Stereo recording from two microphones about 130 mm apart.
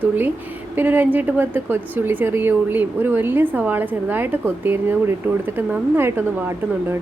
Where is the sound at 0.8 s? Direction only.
15° right (ahead or behind).